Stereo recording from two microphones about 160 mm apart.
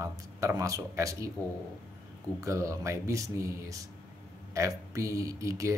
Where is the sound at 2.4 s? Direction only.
20° right (ahead or behind).